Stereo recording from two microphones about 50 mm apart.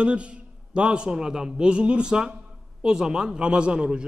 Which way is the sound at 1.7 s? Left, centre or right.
Right.